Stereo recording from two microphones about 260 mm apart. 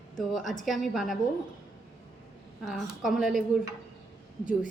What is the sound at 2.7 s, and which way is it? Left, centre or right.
Speech, centre.